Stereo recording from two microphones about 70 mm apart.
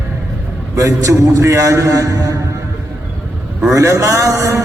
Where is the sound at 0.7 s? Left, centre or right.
Right.